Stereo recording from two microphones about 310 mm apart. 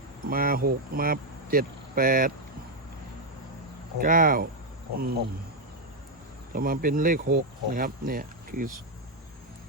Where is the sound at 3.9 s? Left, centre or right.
Right.